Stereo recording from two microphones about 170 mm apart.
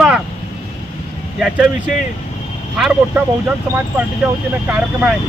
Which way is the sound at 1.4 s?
5° right (ahead or behind).